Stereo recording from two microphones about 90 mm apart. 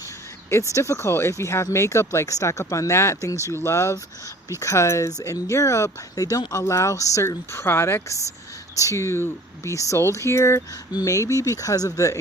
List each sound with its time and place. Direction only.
0.5 s speech: 30° left (ahead or behind)